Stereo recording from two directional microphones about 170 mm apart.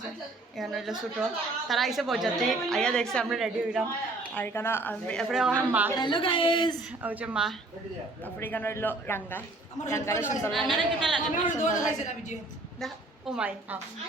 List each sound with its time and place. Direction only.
0.5 s a woman's voice: centre (ahead or behind)
4.4 s speech: 15° left (ahead or behind)
5.3 s a man's voice: 5° right (ahead or behind)
6.0 s a woman's voice: 30° left (ahead or behind)
7.0 s a man's voice: 10° right (ahead or behind)
8.2 s speech: 10° left (ahead or behind)
10.5 s a woman's voice: centre (ahead or behind)
11.4 s a woman's voice: 45° left (ahead or behind)
12.8 s a woman's voice: 5° right (ahead or behind)